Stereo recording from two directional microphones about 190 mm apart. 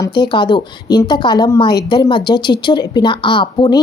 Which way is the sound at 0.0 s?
25° left (ahead or behind).